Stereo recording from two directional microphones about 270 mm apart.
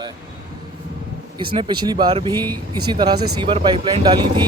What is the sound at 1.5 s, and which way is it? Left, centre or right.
Speech, centre.